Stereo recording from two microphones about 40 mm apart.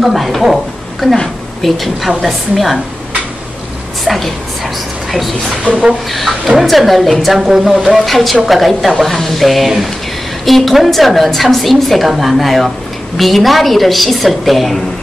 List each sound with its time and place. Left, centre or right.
0.0 s a woman's voice: centre
1.0 s a woman's voice: centre
1.6 s a woman's voice: centre
4.0 s a sound: centre
5.7 s speech: left
6.6 s a woman's voice: centre